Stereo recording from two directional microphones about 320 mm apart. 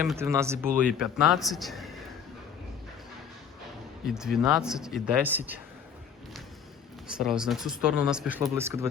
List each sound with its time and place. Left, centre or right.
0.0 s speech: centre
4.0 s speech: centre
7.2 s speech: centre